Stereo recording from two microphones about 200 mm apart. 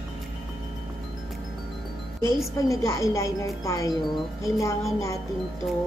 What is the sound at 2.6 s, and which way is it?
A woman's voice, 15° left (ahead or behind).